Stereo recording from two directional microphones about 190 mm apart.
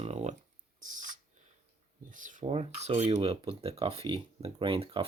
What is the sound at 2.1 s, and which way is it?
Speech, 45° right (ahead or behind).